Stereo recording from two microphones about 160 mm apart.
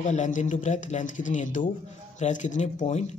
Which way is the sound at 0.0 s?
50° left (ahead or behind).